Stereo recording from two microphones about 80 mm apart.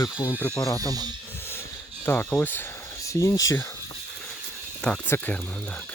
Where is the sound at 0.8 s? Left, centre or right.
Right.